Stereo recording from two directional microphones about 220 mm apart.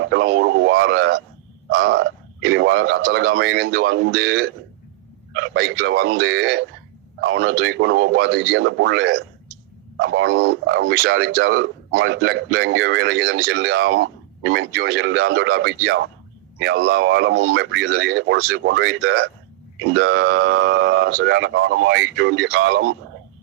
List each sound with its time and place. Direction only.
0.0 s speech: 55° right (ahead or behind)
5.5 s speech: 45° right (ahead or behind)